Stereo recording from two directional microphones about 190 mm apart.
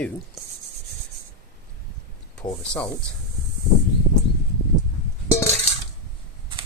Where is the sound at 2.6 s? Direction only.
5° left (ahead or behind).